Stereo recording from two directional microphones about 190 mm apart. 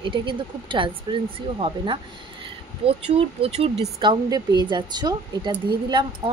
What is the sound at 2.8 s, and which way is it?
A woman's voice, 30° right (ahead or behind).